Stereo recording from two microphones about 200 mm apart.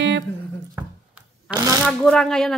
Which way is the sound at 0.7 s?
5° right (ahead or behind).